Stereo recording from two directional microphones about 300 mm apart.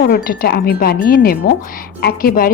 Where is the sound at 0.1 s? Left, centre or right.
Left.